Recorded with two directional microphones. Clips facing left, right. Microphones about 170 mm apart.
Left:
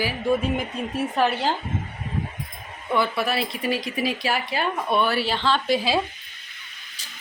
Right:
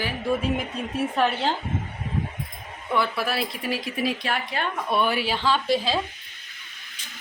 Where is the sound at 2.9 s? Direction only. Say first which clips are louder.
Left 2 dB; centre (ahead or behind).